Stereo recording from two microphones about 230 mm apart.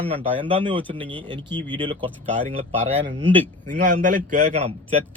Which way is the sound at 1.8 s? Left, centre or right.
Right.